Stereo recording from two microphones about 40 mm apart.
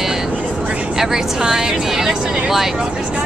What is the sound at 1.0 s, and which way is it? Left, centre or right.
Speech, centre.